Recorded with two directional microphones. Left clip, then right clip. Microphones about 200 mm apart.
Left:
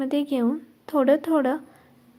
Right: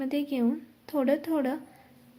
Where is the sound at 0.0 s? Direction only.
20° left (ahead or behind).